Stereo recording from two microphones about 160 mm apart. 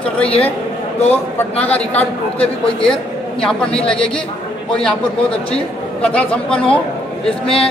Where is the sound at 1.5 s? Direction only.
40° left (ahead or behind).